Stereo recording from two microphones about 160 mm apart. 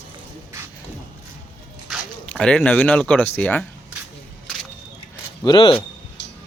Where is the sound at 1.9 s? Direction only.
5° left (ahead or behind).